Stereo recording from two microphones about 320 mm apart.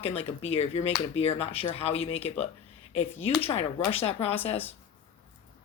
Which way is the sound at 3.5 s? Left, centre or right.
Centre.